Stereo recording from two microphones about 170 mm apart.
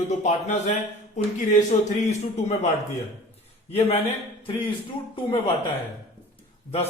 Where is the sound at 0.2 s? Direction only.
45° left (ahead or behind).